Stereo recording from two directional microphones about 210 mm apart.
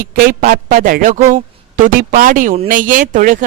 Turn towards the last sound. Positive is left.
turn(degrees=-40)  # may be behind; listen again after turning